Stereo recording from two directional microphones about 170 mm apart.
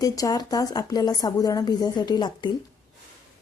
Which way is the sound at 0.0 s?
20° left (ahead or behind).